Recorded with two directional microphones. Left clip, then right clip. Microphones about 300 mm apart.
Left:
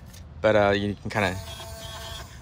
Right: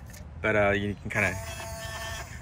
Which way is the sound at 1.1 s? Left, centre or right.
Centre.